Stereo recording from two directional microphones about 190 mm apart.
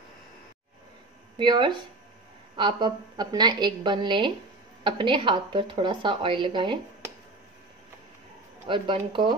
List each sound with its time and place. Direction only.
1.4 s a woman's voice: 25° right (ahead or behind)
8.6 s a woman's voice: 25° right (ahead or behind)